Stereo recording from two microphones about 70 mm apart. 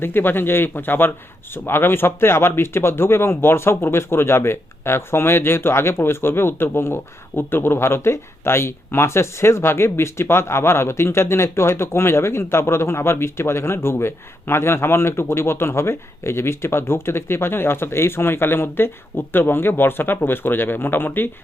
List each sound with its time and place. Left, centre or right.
0.0 s speech: left